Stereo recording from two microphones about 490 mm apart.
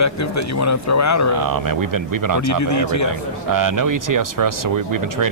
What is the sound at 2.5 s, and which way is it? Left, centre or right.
Speech, left.